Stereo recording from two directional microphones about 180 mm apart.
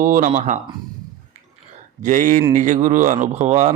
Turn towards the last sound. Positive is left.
turn(degrees=-40)  # may be behind; listen again after turning